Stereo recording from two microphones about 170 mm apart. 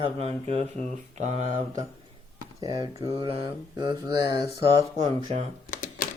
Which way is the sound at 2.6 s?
25° right (ahead or behind).